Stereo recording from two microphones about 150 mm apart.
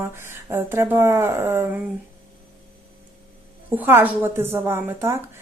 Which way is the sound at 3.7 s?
15° right (ahead or behind).